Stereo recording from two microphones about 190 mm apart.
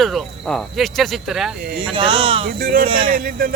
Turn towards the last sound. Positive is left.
turn(degrees=-45)  # may be behind; listen again after turning